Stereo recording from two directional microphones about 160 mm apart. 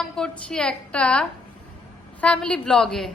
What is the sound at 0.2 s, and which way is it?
A woman's voice, 5° left (ahead or behind).